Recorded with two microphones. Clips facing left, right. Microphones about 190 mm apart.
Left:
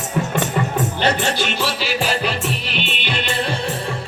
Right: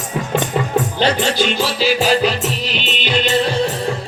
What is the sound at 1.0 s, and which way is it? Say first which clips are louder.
Music: right 3 dB; 55° left (ahead or behind).